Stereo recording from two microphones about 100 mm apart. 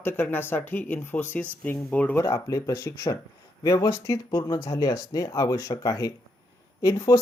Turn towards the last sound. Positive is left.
turn(degrees=35)  # may be behind; listen again after turning